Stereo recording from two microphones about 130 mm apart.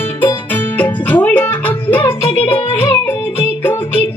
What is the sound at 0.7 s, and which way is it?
Music, 10° left (ahead or behind).